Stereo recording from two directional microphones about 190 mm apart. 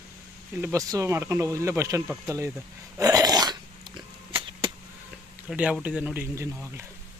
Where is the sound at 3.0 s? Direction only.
20° right (ahead or behind).